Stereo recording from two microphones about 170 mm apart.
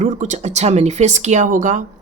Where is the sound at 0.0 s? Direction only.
45° right (ahead or behind).